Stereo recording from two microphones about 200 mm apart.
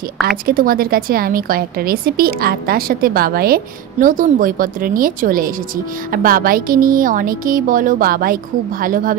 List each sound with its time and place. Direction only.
0.5 s a woman's voice: 45° right (ahead or behind)